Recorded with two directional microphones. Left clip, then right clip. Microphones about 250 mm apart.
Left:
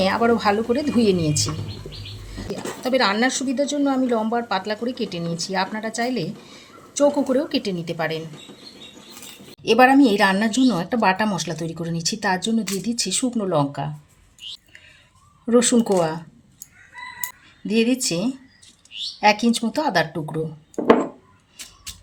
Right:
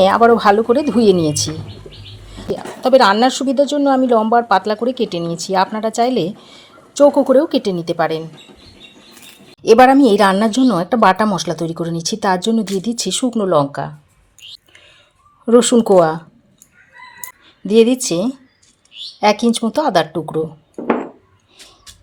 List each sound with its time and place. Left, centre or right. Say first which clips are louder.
0.0 s speech: right 9 dB; right
2.8 s speech: right 9 dB; right
9.6 s speech: right 6 dB; right
15.9 s speech: right 9 dB; right
17.7 s speech: right 9 dB; right